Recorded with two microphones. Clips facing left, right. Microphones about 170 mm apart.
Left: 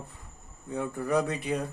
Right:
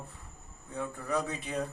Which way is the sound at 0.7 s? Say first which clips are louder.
Left 5 dB; 70° left (ahead or behind).